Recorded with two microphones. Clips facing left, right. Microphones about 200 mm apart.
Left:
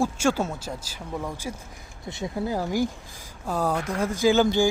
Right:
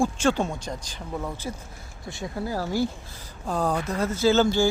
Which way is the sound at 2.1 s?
20° left (ahead or behind).